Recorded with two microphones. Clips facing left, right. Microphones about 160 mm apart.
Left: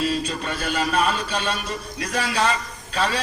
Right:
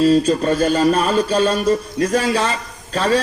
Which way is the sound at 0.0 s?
40° right (ahead or behind).